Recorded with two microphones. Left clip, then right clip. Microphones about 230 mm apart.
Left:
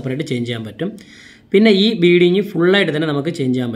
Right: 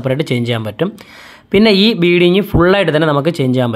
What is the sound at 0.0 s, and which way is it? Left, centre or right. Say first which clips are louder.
Speech: right 6 dB; right.